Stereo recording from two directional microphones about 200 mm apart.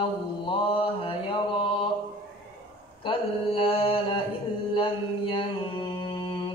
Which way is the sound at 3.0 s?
25° left (ahead or behind).